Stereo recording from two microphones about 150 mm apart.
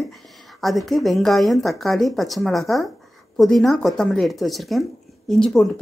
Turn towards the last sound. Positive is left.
turn(degrees=5)  # may be behind; listen again after turning